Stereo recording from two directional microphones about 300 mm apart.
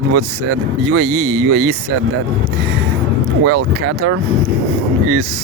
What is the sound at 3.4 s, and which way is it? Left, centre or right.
Speech, right.